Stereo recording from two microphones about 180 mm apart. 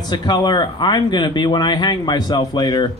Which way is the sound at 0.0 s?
25° left (ahead or behind).